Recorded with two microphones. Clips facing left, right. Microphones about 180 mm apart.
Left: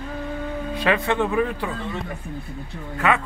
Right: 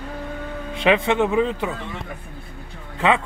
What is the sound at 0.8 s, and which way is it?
Speech, 20° right (ahead or behind).